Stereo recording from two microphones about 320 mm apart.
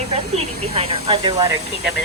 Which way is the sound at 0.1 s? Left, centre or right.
Centre.